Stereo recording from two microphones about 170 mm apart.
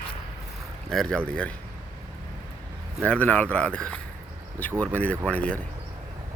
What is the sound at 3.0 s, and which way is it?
Speech, 10° left (ahead or behind).